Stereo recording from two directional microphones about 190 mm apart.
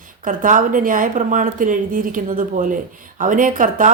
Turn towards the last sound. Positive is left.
turn(degrees=-45)  # may be behind; listen again after turning